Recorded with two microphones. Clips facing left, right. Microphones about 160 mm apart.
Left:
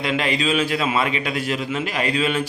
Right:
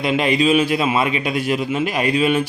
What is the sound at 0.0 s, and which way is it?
Speech, 15° right (ahead or behind).